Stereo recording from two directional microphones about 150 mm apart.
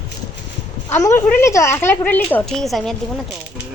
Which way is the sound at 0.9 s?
20° left (ahead or behind).